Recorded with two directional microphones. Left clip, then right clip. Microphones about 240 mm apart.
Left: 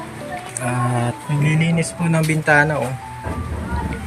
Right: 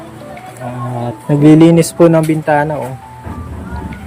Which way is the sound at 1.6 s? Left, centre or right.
Right.